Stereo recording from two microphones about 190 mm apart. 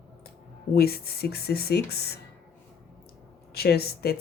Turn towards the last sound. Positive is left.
turn(degrees=55)  # may be behind; listen again after turning